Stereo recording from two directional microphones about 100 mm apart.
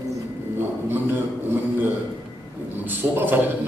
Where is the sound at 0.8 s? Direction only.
20° right (ahead or behind).